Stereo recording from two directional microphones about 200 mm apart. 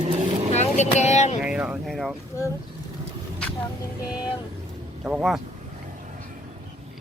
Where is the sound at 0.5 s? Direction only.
35° left (ahead or behind).